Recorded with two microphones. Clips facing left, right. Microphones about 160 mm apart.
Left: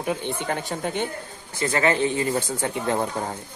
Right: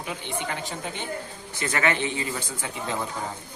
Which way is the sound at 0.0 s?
50° left (ahead or behind).